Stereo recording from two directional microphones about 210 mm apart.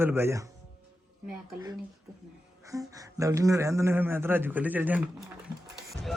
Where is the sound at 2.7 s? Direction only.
15° right (ahead or behind).